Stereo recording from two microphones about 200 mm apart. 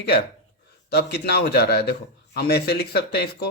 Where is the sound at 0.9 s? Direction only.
55° left (ahead or behind).